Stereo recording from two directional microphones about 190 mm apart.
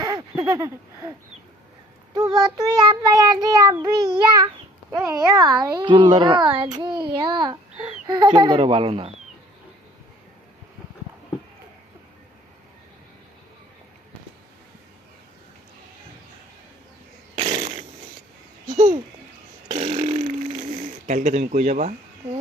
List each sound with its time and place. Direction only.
0.0 s a sound: 20° right (ahead or behind)
2.1 s child singing: 20° right (ahead or behind)
17.5 s fart: 25° right (ahead or behind)
18.7 s speech: 40° right (ahead or behind)
19.8 s burping: 35° right (ahead or behind)
21.1 s speech: 40° right (ahead or behind)